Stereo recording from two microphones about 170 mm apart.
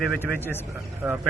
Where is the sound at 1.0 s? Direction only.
10° right (ahead or behind).